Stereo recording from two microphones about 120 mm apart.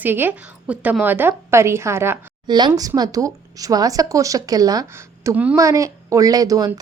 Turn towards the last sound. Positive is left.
turn(degrees=-30)  # may be behind; listen again after turning